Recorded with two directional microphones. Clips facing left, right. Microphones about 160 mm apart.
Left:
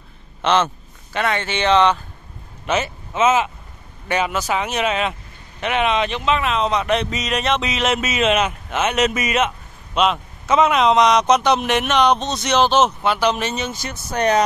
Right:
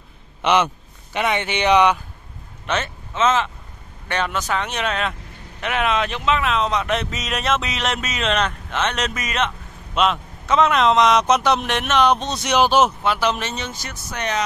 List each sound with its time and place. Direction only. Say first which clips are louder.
0.4 s a man's voice: even; 10° right (ahead or behind)
2.6 s speech: left 3 dB; 10° left (ahead or behind)
14.1 s speech: left 8 dB; 40° left (ahead or behind)